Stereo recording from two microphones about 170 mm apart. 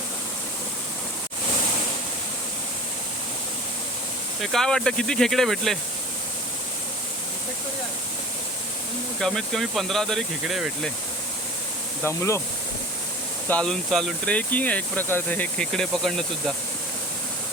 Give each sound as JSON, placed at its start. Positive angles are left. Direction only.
{"t": 4.4, "sound": "speech", "side_deg": 5}
{"t": 9.2, "sound": "speech", "side_deg": 5}
{"t": 12.0, "sound": "speech", "side_deg": 15}
{"t": 13.5, "sound": "speech", "side_deg": 5}